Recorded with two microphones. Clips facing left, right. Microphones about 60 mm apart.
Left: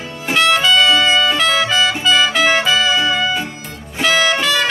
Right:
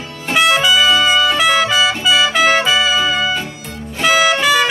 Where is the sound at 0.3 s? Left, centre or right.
Centre.